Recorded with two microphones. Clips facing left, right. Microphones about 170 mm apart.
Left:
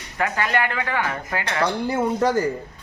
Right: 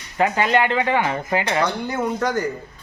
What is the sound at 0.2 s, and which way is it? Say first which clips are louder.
Speech: right 4 dB; 20° right (ahead or behind).